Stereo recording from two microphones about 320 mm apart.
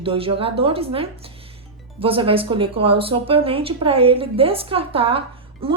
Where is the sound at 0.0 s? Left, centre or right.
Centre.